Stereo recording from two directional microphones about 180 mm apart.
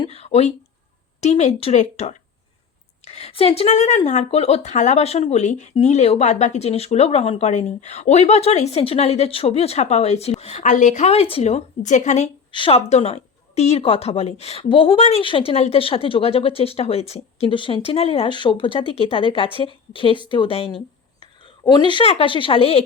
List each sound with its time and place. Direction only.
0.0 s a woman's voice: 35° left (ahead or behind)
12.5 s a woman's voice: 30° left (ahead or behind)